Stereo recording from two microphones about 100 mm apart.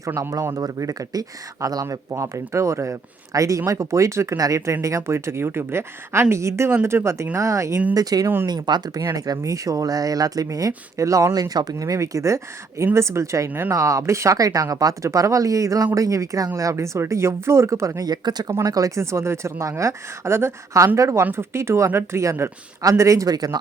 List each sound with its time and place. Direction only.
0.0 s speech: 30° right (ahead or behind); by 8.8 s 45° right (ahead or behind)
9.0 s speech: 35° right (ahead or behind)
13.7 s speech: 35° right (ahead or behind)